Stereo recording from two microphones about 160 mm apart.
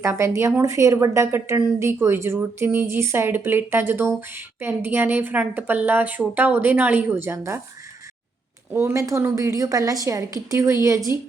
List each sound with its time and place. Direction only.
0.0 s a woman's voice: 15° right (ahead or behind)
8.7 s a woman's voice: 15° right (ahead or behind)